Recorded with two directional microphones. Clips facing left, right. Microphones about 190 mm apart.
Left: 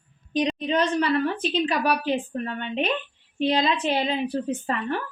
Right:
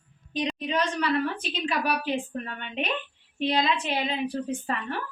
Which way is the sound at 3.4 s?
30° left (ahead or behind).